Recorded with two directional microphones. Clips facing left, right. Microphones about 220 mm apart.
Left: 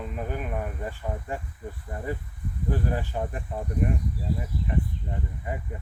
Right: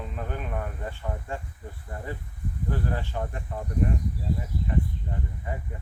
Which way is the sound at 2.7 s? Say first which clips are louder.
Left 3 dB; 15° left (ahead or behind).